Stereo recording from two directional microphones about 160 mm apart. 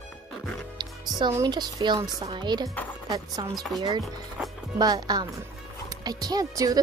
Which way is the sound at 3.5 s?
Centre (ahead or behind).